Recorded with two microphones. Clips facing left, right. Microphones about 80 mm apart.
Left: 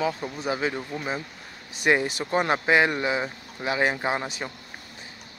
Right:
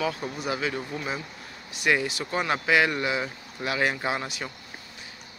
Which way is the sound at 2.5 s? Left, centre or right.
Left.